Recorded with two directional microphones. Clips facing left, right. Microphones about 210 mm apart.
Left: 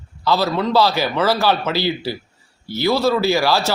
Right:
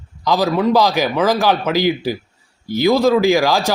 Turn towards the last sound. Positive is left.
turn(degrees=-15)  # may be behind; listen again after turning